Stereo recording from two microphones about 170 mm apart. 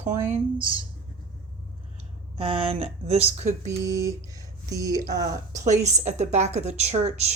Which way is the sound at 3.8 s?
20° right (ahead or behind).